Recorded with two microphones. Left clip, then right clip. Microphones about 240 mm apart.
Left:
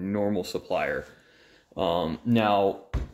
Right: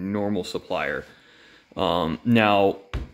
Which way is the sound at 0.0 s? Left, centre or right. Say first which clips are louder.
Right 1 dB; centre.